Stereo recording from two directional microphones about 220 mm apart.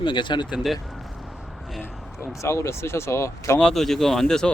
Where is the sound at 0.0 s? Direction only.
20° left (ahead or behind).